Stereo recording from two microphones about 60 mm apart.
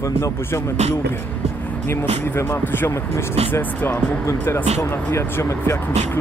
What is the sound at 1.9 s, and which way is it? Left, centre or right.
Speech, left.